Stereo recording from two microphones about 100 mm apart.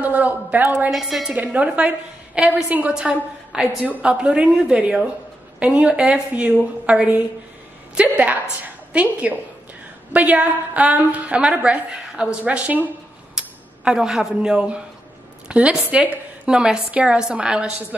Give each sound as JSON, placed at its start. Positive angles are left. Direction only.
{"t": 0.0, "sound": "a woman's voice", "side_deg": -15}
{"t": 0.9, "sound": "a woman's voice", "side_deg": 0}
{"t": 1.3, "sound": "a woman's voice", "side_deg": -15}
{"t": 15.4, "sound": "a sound", "side_deg": -10}
{"t": 15.7, "sound": "a woman's voice", "side_deg": -10}